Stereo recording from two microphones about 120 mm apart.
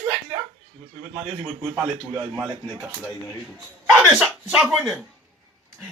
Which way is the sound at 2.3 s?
10° right (ahead or behind).